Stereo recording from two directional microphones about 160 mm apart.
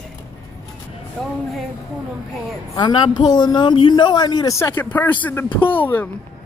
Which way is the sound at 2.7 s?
30° left (ahead or behind).